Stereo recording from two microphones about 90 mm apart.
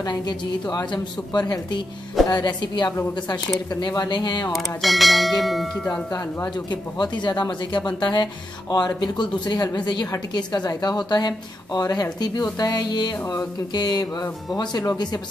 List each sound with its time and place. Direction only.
0.0 s speech: 50° left (ahead or behind)
4.5 s bell: centre (ahead or behind)
6.5 s speech: 55° left (ahead or behind)